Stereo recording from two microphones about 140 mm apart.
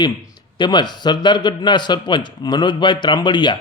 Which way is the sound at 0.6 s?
30° left (ahead or behind).